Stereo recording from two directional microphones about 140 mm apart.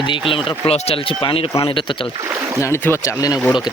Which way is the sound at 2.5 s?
20° left (ahead or behind).